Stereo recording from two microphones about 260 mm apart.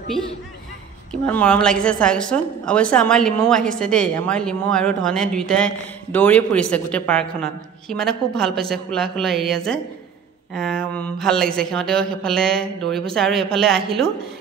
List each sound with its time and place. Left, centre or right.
1.2 s a woman's voice: centre